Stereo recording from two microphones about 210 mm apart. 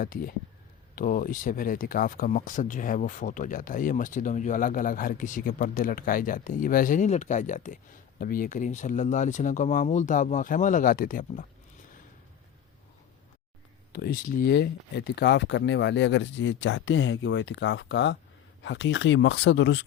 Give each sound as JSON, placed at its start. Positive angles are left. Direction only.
{"t": 0.0, "sound": "speech", "side_deg": 45}
{"t": 13.9, "sound": "speech", "side_deg": 45}